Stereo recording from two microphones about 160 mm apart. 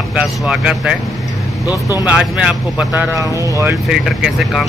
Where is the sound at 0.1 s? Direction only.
5° right (ahead or behind).